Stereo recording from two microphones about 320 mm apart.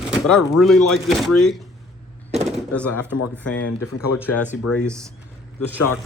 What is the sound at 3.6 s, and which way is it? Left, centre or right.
Speech, left.